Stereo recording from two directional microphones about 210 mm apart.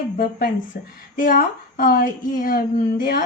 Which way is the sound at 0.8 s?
40° left (ahead or behind).